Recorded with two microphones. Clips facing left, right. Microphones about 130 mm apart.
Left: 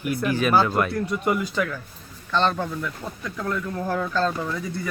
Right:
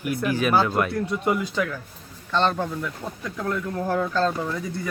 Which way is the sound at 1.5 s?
Centre (ahead or behind).